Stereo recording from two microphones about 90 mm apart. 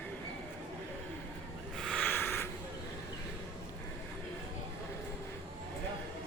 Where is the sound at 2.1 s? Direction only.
25° left (ahead or behind).